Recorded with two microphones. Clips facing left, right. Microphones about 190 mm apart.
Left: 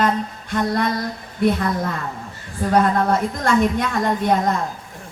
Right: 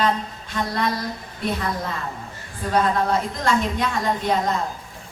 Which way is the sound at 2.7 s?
55° left (ahead or behind).